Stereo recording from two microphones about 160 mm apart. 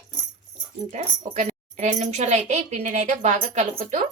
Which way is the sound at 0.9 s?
45° right (ahead or behind).